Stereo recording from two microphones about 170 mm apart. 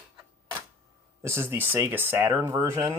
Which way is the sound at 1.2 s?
15° right (ahead or behind).